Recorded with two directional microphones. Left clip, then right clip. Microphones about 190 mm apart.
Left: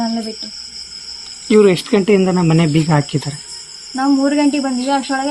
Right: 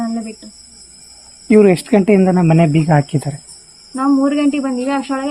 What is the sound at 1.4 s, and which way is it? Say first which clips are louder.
Speech: even; 55° right (ahead or behind).